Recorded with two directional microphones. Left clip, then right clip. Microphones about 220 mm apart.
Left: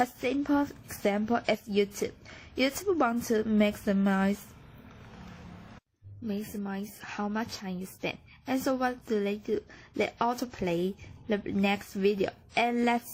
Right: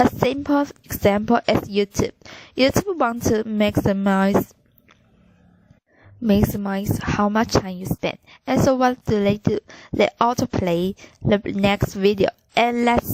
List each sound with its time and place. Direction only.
0.2 s a woman's voice: 40° right (ahead or behind)
6.2 s a woman's voice: 45° right (ahead or behind)